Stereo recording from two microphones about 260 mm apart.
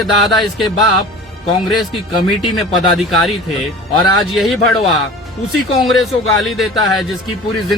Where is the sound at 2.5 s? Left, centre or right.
Centre.